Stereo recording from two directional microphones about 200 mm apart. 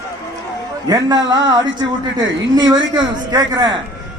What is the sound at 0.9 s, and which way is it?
A man's voice, 20° right (ahead or behind).